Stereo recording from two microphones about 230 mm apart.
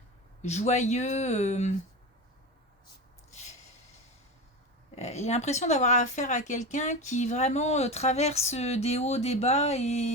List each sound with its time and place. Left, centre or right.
0.4 s speech: left
4.9 s speech: left